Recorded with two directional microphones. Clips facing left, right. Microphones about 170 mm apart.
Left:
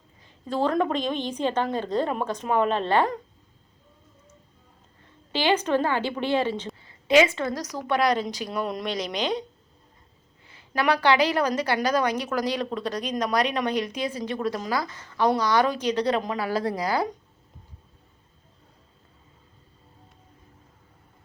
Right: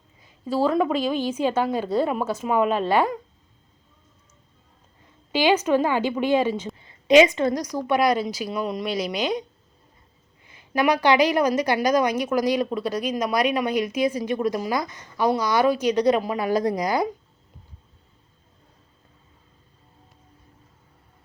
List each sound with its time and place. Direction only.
0.2 s a woman's voice: 10° right (ahead or behind)
5.3 s a woman's voice: 10° right (ahead or behind)
10.4 s a woman's voice: 15° right (ahead or behind)